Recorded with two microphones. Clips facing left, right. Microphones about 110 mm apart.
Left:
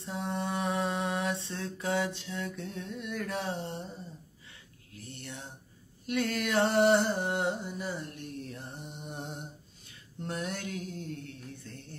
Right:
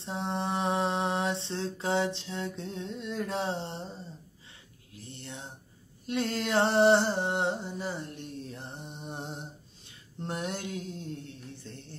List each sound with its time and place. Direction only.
0.0 s mantra: 25° right (ahead or behind)
6.0 s a sound: 25° right (ahead or behind)
10.2 s mantra: 25° right (ahead or behind)